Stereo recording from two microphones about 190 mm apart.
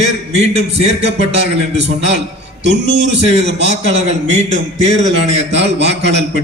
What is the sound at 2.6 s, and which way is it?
Speech, 65° right (ahead or behind).